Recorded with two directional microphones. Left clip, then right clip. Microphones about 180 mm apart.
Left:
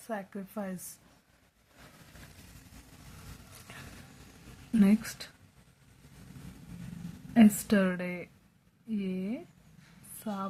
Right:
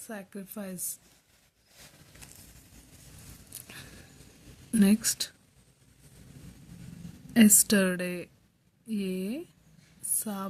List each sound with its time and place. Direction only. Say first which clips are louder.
0.1 s a woman's voice: left 4 dB; 30° right (ahead or behind)
4.8 s speech: right 3 dB; 80° right
7.3 s speech: right 2 dB; 80° right